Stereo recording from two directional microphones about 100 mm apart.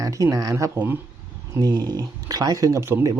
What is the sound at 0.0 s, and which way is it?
Speech, 35° right (ahead or behind).